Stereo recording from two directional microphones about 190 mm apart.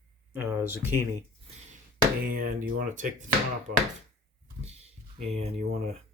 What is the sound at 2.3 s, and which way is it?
Speech, 45° right (ahead or behind).